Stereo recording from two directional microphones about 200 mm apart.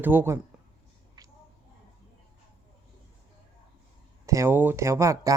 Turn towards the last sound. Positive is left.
turn(degrees=-15)  # may be behind; listen again after turning